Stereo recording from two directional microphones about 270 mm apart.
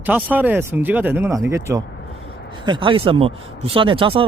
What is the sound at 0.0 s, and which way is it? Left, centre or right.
Speech, centre.